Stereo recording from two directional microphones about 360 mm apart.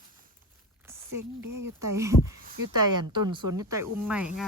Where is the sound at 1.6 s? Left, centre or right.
Centre.